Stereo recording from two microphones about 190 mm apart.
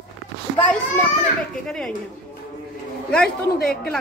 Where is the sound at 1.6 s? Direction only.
Centre (ahead or behind).